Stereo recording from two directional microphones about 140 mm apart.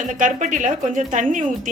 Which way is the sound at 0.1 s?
65° right (ahead or behind).